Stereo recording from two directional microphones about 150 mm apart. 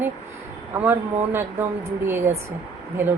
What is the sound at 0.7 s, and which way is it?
A woman's voice, 15° right (ahead or behind).